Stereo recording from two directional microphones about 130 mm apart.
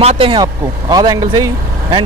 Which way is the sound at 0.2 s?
35° right (ahead or behind).